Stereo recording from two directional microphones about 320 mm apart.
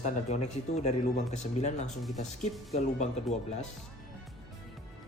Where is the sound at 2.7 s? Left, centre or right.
Left.